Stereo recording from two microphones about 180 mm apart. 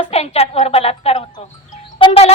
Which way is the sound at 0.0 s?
35° left (ahead or behind).